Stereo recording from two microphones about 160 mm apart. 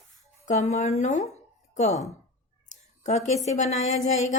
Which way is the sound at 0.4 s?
45° left (ahead or behind).